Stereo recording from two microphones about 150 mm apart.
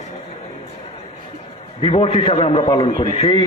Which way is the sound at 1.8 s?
40° left (ahead or behind).